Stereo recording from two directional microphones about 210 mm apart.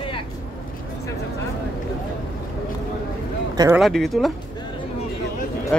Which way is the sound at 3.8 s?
Centre (ahead or behind).